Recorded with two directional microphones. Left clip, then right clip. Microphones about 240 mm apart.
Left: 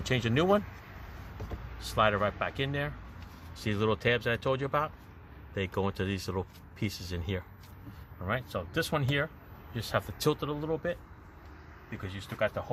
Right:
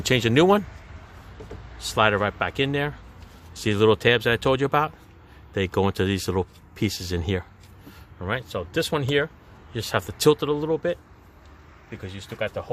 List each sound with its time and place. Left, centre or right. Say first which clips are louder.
0.0 s speech: right 10 dB; right
1.8 s speech: right 6 dB; right